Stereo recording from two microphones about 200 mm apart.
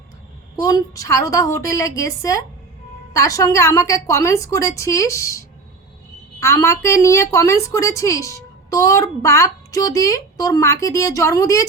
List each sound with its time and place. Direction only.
0.5 s a woman's voice: 20° left (ahead or behind)